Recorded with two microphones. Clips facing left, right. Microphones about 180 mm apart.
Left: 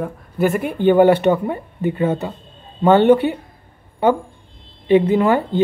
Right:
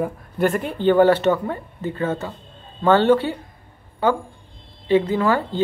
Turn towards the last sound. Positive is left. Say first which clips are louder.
# left 4 dB
turn(degrees=20)  # may be behind; listen again after turning